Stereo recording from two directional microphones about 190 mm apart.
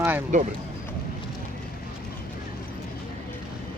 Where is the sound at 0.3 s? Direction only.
40° right (ahead or behind).